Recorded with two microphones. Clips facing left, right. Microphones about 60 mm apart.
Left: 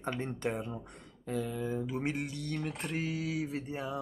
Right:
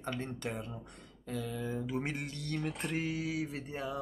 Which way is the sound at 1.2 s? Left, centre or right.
Centre.